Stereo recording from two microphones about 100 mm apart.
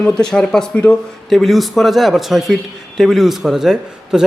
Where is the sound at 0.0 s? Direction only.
10° left (ahead or behind).